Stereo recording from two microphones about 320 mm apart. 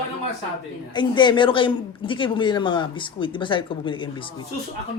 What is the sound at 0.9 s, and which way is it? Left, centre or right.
A woman's voice, centre.